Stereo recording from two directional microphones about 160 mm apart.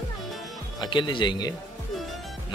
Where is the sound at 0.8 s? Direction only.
30° left (ahead or behind).